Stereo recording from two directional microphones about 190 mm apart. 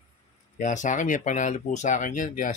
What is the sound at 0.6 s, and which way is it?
A man's voice, 40° left (ahead or behind).